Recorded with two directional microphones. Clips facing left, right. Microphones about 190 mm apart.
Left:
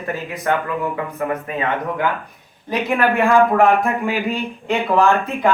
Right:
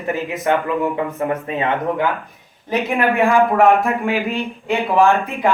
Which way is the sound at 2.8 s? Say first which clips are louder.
Left 1 dB; 15° right (ahead or behind).